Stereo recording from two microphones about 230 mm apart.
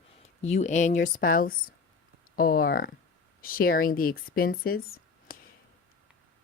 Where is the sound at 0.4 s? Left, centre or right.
Left.